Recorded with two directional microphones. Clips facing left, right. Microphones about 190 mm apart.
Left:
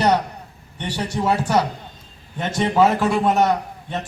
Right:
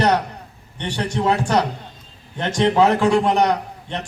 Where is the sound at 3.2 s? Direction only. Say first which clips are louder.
Even; 15° right (ahead or behind).